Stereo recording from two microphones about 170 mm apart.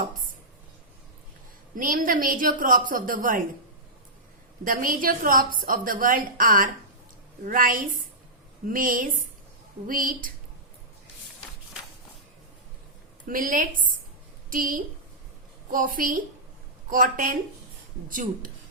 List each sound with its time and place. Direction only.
1.7 s a woman's voice: 55° right (ahead or behind)
4.6 s a woman's voice: 55° right (ahead or behind)
13.2 s a woman's voice: 55° right (ahead or behind)